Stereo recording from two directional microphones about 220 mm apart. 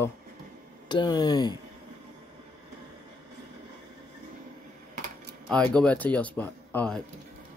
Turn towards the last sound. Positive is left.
turn(degrees=5)  # may be behind; listen again after turning